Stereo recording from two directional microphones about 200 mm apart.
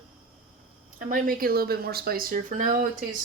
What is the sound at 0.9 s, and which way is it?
Speech, 45° right (ahead or behind).